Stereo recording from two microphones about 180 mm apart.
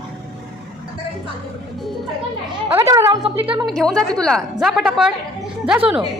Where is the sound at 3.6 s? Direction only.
Centre (ahead or behind).